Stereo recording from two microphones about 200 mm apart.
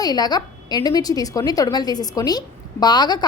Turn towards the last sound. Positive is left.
turn(degrees=20)  # may be behind; listen again after turning